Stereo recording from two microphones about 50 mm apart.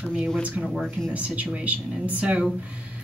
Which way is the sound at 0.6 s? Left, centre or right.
Centre.